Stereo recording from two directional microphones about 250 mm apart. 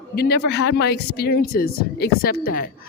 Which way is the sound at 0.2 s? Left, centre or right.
Left.